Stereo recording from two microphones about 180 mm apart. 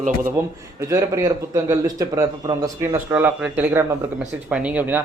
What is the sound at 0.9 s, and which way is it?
Speech, 20° right (ahead or behind).